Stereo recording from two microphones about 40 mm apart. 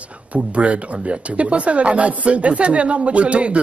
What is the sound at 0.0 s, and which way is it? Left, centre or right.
Speech, right.